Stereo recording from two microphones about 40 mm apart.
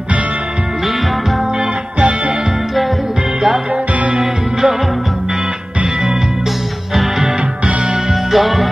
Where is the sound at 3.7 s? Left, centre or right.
Right.